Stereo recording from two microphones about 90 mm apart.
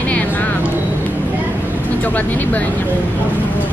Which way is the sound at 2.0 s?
20° left (ahead or behind).